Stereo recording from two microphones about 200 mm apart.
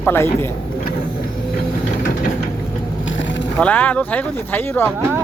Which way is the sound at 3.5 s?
5° left (ahead or behind).